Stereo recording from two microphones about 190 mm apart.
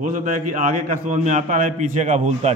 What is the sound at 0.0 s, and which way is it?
A man's voice, 45° right (ahead or behind).